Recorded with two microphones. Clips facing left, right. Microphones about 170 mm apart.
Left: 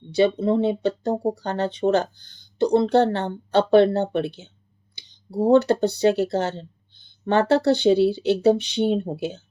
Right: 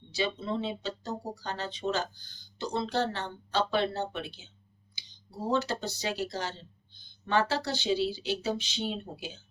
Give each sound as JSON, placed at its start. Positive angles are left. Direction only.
{"t": 0.1, "sound": "speech", "side_deg": 55}